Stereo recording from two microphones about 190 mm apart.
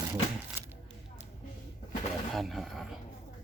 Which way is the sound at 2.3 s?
Centre (ahead or behind).